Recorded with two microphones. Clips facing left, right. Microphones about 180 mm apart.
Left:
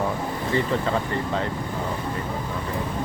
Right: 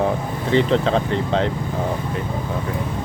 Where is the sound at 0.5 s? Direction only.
85° right.